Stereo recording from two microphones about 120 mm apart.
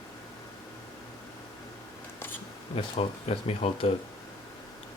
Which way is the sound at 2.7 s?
55° left (ahead or behind).